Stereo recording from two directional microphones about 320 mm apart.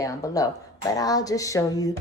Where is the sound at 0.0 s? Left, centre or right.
Centre.